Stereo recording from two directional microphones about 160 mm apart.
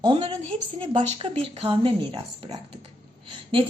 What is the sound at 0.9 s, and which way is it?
Speech, 40° right (ahead or behind).